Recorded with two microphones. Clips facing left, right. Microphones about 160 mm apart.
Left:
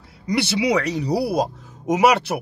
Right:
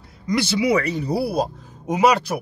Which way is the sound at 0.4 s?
70° left (ahead or behind).